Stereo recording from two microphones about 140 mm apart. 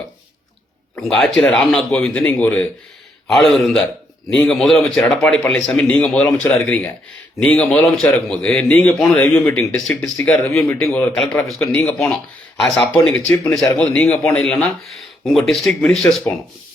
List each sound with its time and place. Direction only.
0.9 s a man's voice: 5° left (ahead or behind)
9.9 s speech: 20° left (ahead or behind)
10.2 s speech: 5° left (ahead or behind)
11.7 s a man's voice: 15° left (ahead or behind)
12.1 s a man's voice: centre (ahead or behind)